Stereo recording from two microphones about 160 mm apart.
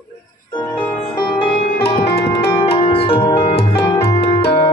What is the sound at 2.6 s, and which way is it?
Music, 35° left (ahead or behind).